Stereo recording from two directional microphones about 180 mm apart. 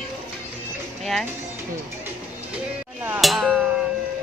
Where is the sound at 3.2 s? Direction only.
Centre (ahead or behind).